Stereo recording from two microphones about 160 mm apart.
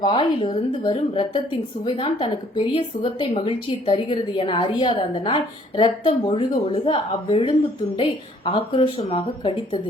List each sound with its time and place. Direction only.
0.0 s speech: 30° left (ahead or behind)